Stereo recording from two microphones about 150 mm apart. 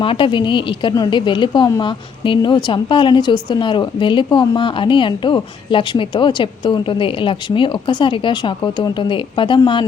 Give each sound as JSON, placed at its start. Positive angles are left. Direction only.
{"t": 0.0, "sound": "a woman's voice", "side_deg": 35}